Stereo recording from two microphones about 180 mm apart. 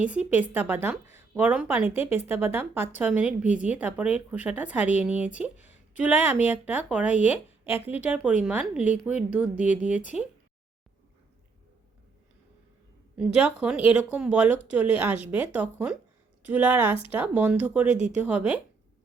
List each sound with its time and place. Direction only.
0.0 s speech: 10° right (ahead or behind)
7.7 s speech: 35° left (ahead or behind)
8.0 s speech: 5° right (ahead or behind)
13.1 s speech: 5° right (ahead or behind)